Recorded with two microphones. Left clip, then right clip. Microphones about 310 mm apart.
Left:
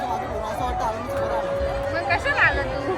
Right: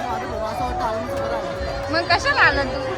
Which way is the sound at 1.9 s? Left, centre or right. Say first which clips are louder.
Right 6 dB; centre.